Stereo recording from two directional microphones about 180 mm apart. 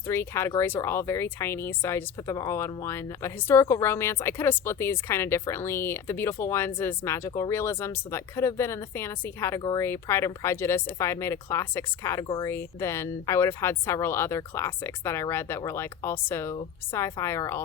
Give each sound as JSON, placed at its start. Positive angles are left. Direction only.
{"t": 0.1, "sound": "speech", "side_deg": 15}